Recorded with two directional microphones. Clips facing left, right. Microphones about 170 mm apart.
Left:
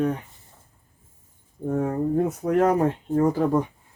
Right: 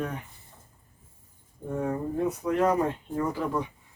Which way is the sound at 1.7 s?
45° left (ahead or behind).